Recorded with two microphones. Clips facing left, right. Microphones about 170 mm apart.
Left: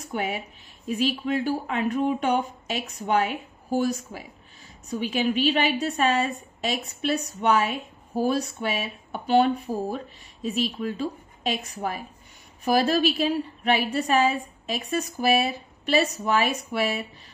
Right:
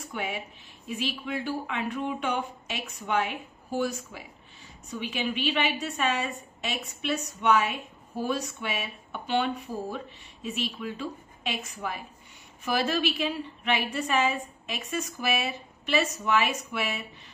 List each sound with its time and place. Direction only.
0.0 s a woman's voice: 45° left (ahead or behind)